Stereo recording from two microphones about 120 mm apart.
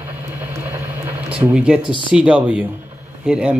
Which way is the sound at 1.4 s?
10° right (ahead or behind).